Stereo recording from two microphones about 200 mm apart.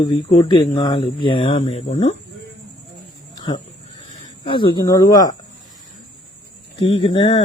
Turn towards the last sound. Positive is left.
turn(degrees=25)  # may be behind; listen again after turning